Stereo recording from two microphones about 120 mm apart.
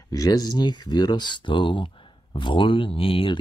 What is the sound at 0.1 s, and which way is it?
Speech, 30° left (ahead or behind).